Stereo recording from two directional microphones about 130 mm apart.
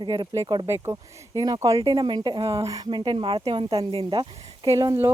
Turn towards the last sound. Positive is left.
turn(degrees=-25)  # may be behind; listen again after turning